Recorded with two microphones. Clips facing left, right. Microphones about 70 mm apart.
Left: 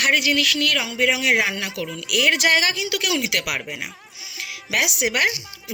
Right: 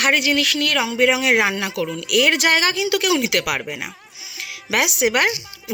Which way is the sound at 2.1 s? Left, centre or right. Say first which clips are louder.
Right 2 dB; right.